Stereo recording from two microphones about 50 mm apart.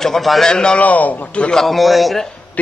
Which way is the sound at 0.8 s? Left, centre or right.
Left.